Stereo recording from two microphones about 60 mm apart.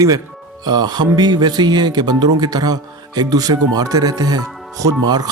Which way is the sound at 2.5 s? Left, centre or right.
Right.